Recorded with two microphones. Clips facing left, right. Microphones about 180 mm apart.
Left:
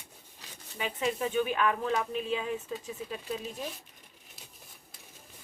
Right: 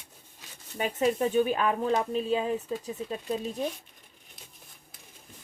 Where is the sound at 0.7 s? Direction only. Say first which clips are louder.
Right 6 dB; 40° right (ahead or behind).